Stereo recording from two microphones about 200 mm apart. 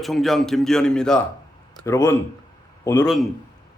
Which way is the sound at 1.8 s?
15° left (ahead or behind).